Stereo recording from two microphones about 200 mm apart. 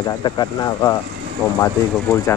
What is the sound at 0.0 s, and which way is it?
Speech, 20° left (ahead or behind).